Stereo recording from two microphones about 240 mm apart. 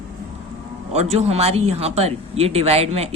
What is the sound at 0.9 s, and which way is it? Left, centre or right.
Speech, right.